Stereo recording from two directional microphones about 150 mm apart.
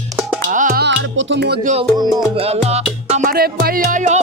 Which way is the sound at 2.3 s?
45° right (ahead or behind).